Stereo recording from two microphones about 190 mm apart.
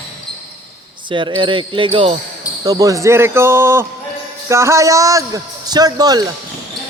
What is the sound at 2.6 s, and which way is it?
A man's voice, 20° right (ahead or behind).